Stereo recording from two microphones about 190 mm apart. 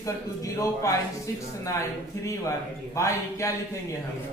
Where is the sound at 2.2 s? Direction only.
15° left (ahead or behind).